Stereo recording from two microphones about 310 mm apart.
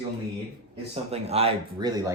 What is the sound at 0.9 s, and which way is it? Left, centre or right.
Speech, centre.